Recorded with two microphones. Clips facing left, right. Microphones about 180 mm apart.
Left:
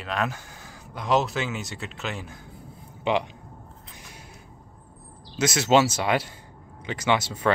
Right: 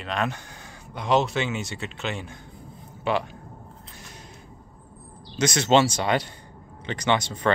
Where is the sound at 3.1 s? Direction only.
15° left (ahead or behind).